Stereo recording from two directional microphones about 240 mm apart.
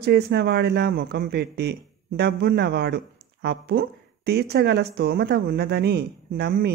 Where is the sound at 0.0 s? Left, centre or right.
Right.